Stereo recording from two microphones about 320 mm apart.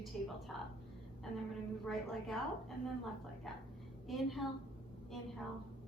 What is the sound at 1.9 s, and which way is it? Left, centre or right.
Speech, centre.